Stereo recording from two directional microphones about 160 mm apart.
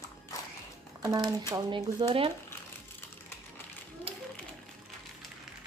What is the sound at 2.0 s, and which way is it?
Speech, 35° right (ahead or behind).